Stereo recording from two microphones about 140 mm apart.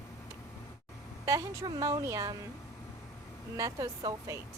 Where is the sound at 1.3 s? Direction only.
25° right (ahead or behind).